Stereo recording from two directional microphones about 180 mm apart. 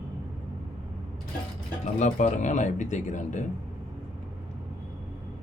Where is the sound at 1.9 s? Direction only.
45° left (ahead or behind).